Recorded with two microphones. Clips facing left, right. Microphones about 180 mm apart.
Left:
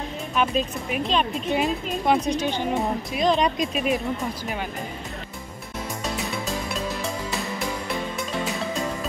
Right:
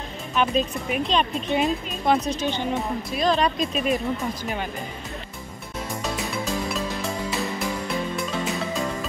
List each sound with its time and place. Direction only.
0.4 s speech: centre (ahead or behind); by 3.7 s 15° left (ahead or behind)
3.7 s speech: 5° left (ahead or behind)
6.3 s music: centre (ahead or behind)